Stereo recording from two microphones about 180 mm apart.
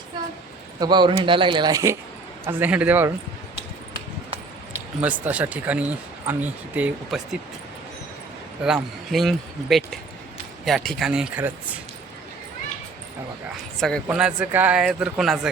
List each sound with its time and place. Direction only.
0.8 s speech: 25° right (ahead or behind)
4.9 s speech: 10° right (ahead or behind)
8.6 s speech: centre (ahead or behind)
13.7 s speech: centre (ahead or behind)